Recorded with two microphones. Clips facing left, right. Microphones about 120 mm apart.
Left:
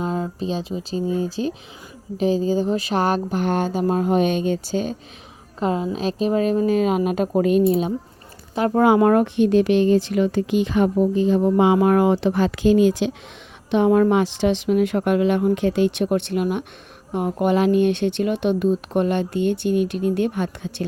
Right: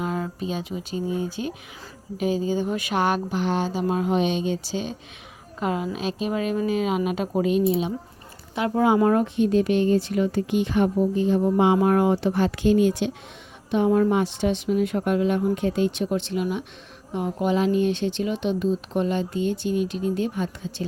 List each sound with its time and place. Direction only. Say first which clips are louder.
0.0 s speech: left 3 dB; 25° left (ahead or behind); by 4.9 s 45° left (ahead or behind)
5.5 s a woman's voice: left 4 dB; 30° left (ahead or behind)
8.8 s speech: left 4 dB; 65° left (ahead or behind)